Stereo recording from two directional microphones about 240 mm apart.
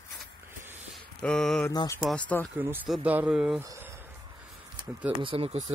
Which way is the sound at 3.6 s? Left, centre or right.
Centre.